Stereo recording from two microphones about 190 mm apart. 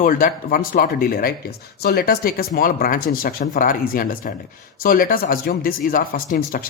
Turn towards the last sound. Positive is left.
turn(degrees=45)  # may be behind; listen again after turning